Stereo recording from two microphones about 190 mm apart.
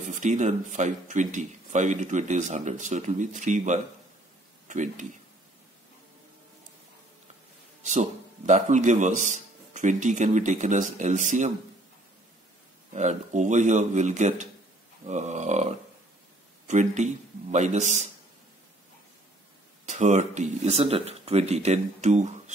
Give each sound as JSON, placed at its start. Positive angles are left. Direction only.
{"t": 0.1, "sound": "speech", "side_deg": -40}
{"t": 7.8, "sound": "speech", "side_deg": -40}
{"t": 12.9, "sound": "speech", "side_deg": -40}
{"t": 19.9, "sound": "speech", "side_deg": -40}